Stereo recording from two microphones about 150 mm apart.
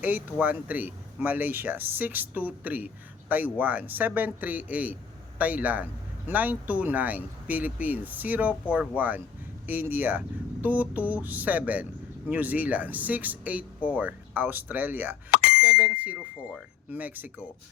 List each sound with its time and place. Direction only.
0.0 s speech: 10° right (ahead or behind)
15.3 s bicycle bell: 80° left
15.6 s speech: 10° right (ahead or behind)